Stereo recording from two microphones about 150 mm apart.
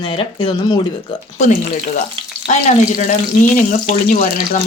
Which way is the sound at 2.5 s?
55° left (ahead or behind).